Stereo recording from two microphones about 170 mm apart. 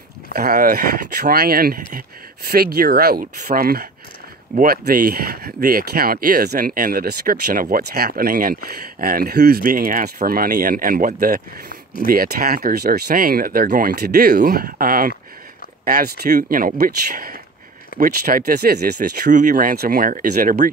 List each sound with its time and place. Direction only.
0.3 s speech: 60° right (ahead or behind)
11.7 s a sound: 60° left (ahead or behind)
12.1 s speech: 60° right (ahead or behind)